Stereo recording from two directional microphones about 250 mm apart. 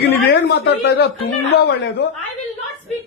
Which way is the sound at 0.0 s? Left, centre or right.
Left.